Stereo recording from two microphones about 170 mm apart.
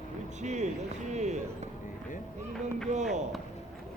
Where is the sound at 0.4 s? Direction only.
45° right (ahead or behind).